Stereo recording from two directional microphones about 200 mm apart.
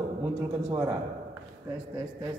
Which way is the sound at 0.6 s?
15° right (ahead or behind).